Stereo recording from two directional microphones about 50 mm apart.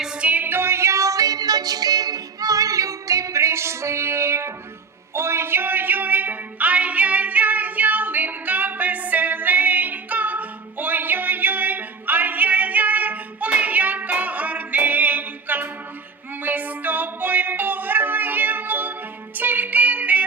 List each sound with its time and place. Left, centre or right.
0.0 s music: centre
0.3 s music: right
2.7 s music: right